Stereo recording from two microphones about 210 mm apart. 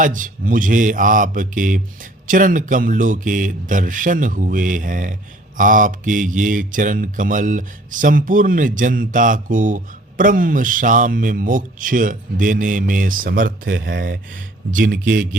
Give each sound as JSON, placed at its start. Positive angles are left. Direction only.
{"t": 0.0, "sound": "mantra", "side_deg": -40}
{"t": 13.7, "sound": "speech", "side_deg": -60}
{"t": 14.0, "sound": "speech", "side_deg": -40}